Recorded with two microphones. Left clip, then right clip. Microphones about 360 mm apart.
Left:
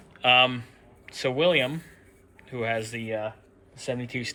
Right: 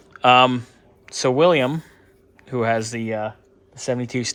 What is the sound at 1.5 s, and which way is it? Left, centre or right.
Speech, right.